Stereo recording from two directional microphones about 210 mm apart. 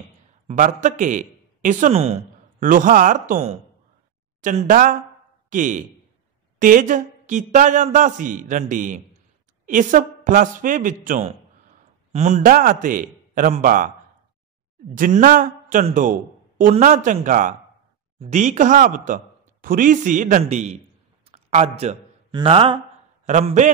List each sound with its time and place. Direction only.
0.5 s a man's voice: 35° right (ahead or behind)
15.0 s a man's voice: 40° right (ahead or behind)